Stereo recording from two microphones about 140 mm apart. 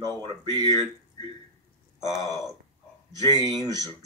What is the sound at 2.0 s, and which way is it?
Speech, 25° right (ahead or behind).